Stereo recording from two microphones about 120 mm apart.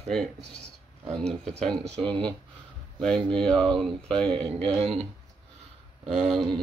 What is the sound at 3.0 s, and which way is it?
Speech, 5° left (ahead or behind).